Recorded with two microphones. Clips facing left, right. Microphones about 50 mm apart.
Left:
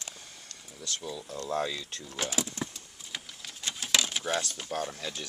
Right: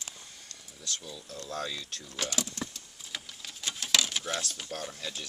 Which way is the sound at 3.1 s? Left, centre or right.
Centre.